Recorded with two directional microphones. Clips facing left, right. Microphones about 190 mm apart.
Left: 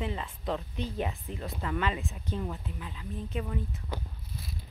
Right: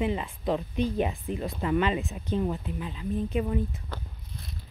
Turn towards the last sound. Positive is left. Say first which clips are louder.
# left 1 dB
turn(degrees=15)  # may be behind; listen again after turning